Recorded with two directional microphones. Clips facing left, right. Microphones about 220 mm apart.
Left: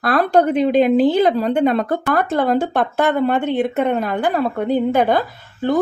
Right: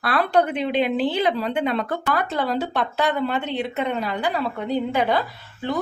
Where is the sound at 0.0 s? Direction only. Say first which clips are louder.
Left 5 dB; 45° left (ahead or behind).